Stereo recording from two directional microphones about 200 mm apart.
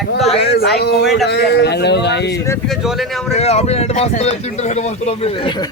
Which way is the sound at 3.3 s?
30° left (ahead or behind).